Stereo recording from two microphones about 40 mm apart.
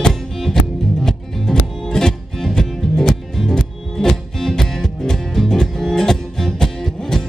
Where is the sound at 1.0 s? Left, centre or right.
Centre.